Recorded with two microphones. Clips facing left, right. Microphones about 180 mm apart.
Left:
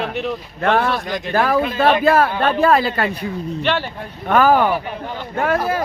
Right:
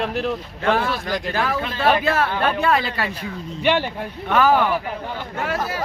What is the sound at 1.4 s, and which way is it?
Speech, 55° left (ahead or behind).